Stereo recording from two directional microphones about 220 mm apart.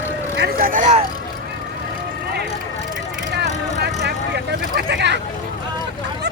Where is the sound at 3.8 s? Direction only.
50° right (ahead or behind).